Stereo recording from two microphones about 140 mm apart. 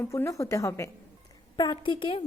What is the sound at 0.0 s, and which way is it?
Speech, 20° left (ahead or behind).